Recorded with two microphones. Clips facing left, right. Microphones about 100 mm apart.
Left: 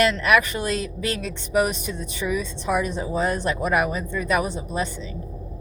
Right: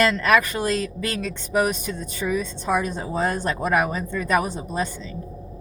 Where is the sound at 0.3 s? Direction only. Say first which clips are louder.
Right 1 dB; 40° right (ahead or behind).